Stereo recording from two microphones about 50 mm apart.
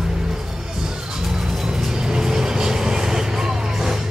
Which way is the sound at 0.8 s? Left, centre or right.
Centre.